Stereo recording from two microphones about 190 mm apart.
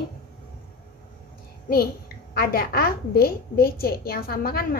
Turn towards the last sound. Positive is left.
turn(degrees=50)  # may be behind; listen again after turning